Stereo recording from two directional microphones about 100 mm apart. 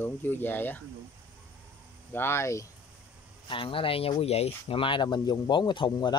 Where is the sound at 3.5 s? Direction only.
60° left (ahead or behind).